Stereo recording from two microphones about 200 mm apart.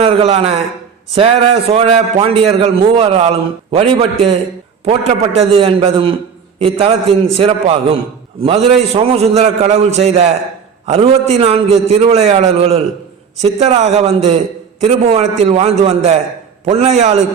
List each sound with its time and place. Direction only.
0.0 s a man's voice: 30° right (ahead or behind)